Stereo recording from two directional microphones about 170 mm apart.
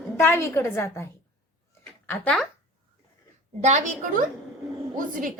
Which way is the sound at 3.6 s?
45° right (ahead or behind).